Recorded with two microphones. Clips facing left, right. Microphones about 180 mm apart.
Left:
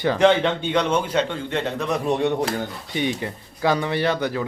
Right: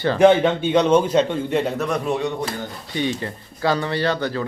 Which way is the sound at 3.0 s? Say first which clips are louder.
Right 1 dB; 15° left (ahead or behind).